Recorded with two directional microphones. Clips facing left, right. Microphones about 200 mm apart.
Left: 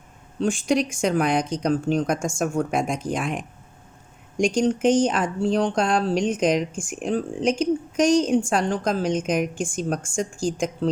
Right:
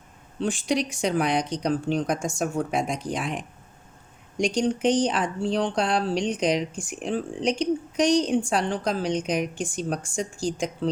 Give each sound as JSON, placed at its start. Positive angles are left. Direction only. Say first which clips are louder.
{"t": 0.3, "sound": "speech", "louder": "left 3 dB", "side_deg": 45}